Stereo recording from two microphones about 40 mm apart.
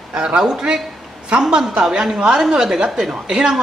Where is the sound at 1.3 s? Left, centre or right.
Centre.